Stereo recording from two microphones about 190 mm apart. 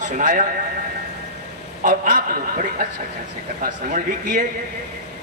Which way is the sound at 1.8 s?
45° right (ahead or behind).